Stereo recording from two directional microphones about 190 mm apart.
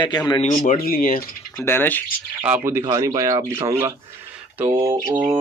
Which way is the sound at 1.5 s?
10° left (ahead or behind).